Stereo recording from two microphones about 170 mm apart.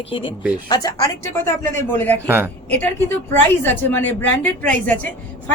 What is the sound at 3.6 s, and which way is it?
A woman's voice, 10° left (ahead or behind).